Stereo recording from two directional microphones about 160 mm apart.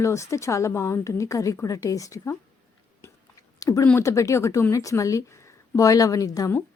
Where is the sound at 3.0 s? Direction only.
20° left (ahead or behind).